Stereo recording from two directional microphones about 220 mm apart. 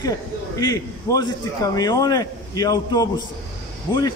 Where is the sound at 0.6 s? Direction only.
15° left (ahead or behind).